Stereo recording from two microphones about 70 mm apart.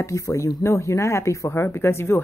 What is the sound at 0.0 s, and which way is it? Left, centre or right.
Speech, left.